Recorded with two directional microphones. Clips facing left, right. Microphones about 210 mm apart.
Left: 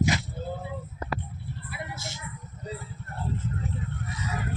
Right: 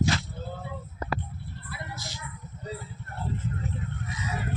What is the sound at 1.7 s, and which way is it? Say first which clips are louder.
Music: left 1 dB; 25° left (ahead or behind).